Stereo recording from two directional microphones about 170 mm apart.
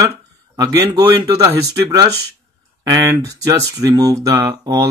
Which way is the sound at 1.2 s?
20° right (ahead or behind).